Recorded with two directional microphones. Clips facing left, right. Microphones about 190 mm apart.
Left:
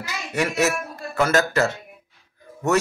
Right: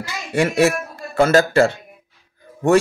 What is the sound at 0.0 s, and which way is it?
Speech, 30° right (ahead or behind).